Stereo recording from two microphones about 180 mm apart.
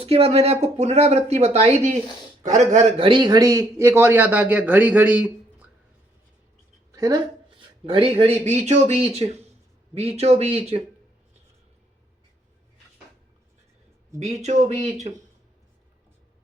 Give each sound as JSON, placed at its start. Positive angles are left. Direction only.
{"t": 0.0, "sound": "speech", "side_deg": -35}
{"t": 3.1, "sound": "a man's voice", "side_deg": -25}
{"t": 6.9, "sound": "speech", "side_deg": -20}
{"t": 14.2, "sound": "speech", "side_deg": -40}